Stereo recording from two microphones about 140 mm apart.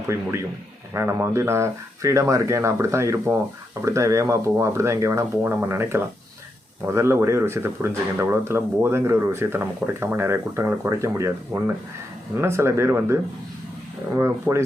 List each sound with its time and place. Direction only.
0.9 s speech: 20° right (ahead or behind)
14.2 s speech: 15° right (ahead or behind)